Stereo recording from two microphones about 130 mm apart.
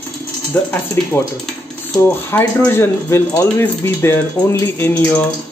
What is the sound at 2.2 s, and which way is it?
Speech, 20° left (ahead or behind).